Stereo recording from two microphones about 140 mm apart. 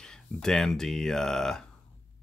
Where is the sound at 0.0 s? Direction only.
5° left (ahead or behind).